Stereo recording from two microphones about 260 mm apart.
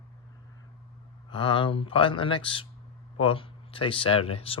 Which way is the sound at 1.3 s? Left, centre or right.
Centre.